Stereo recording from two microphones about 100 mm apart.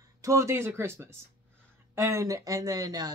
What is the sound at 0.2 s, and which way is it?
Speech, 30° right (ahead or behind).